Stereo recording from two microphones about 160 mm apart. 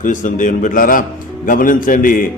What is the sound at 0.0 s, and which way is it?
A man's voice, 55° left (ahead or behind).